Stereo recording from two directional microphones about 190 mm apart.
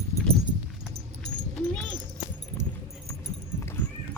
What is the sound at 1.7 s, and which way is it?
Clip-clop, 5° left (ahead or behind).